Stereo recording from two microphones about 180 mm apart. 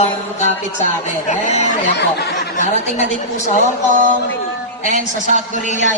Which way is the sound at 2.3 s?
45° left (ahead or behind).